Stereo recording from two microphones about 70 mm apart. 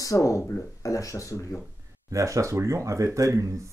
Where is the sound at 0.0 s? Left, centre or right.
Left.